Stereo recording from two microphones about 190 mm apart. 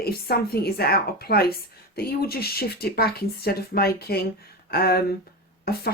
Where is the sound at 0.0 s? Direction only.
55° left (ahead or behind).